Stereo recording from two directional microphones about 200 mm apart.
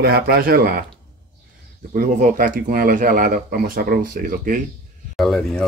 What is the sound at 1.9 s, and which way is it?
Speech, 40° right (ahead or behind).